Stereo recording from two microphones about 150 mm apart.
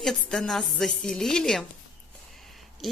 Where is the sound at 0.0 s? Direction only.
5° left (ahead or behind).